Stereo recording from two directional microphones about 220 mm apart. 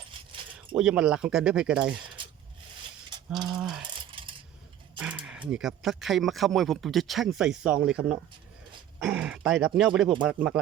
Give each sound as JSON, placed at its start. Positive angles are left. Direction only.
{"t": 0.8, "sound": "speech", "side_deg": -5}
{"t": 3.5, "sound": "speech", "side_deg": 0}
{"t": 4.1, "sound": "coin", "side_deg": -25}
{"t": 4.9, "sound": "speech", "side_deg": -5}